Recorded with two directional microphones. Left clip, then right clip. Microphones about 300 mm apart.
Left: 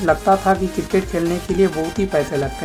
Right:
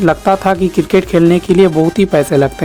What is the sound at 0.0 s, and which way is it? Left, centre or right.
Speech, right.